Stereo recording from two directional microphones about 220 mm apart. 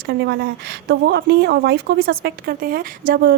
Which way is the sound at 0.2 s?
50° right (ahead or behind).